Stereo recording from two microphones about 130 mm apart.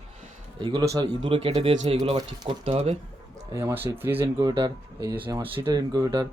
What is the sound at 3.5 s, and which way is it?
Speech, 20° right (ahead or behind).